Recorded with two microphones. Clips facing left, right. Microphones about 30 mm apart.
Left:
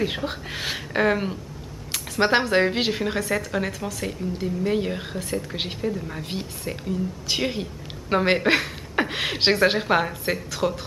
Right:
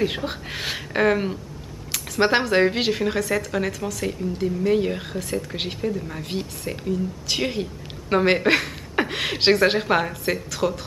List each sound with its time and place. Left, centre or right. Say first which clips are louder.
0.0 s a woman's voice: right 2 dB; centre
1.9 s a sound: right 1 dB; centre
2.5 s a woman's voice: right 2 dB; centre